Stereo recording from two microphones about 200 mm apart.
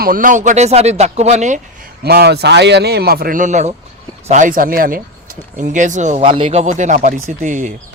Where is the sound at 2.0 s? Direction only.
50° right (ahead or behind); by 6.2 s 35° right (ahead or behind).